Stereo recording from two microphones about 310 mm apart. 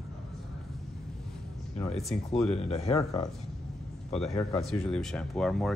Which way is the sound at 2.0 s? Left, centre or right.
Centre.